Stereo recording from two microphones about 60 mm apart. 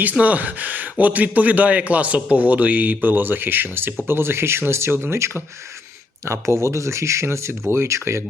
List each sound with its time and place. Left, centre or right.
0.0 s speech: right